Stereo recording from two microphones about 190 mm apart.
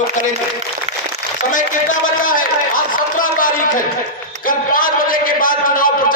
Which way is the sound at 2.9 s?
45° left (ahead or behind).